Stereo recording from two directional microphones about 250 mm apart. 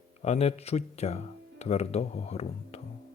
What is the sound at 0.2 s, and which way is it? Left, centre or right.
Speech, left.